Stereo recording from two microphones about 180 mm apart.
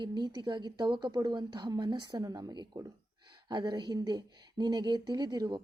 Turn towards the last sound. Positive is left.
turn(degrees=-25)  # may be behind; listen again after turning